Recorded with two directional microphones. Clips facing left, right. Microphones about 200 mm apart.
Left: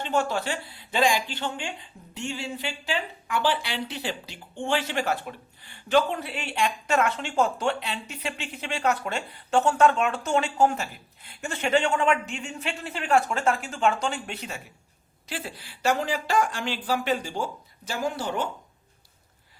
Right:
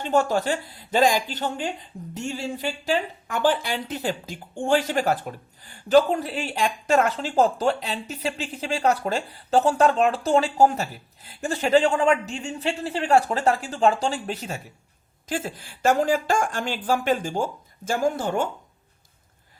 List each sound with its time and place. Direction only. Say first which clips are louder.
0.0 s speech: right 4 dB; 45° right (ahead or behind)